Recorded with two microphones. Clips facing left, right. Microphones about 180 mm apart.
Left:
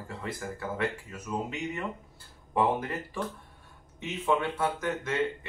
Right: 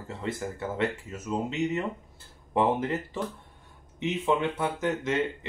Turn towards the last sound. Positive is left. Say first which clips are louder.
# right 3 dB
turn(degrees=-20)  # may be behind; listen again after turning